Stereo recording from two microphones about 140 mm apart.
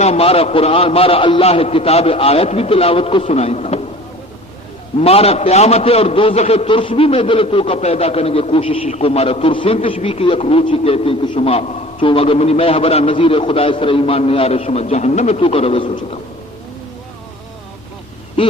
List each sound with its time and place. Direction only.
0.0 s a man's voice: 45° left (ahead or behind)
4.9 s a man's voice: 45° left (ahead or behind)